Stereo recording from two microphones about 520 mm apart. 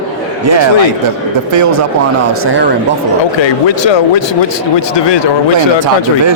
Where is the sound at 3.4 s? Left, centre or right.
Left.